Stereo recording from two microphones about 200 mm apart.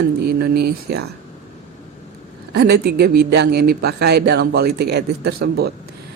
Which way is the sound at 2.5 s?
50° right (ahead or behind).